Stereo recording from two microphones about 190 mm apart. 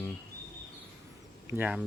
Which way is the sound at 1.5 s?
10° right (ahead or behind).